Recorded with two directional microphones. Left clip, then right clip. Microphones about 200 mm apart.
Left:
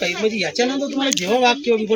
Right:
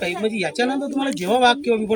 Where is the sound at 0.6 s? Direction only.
10° right (ahead or behind).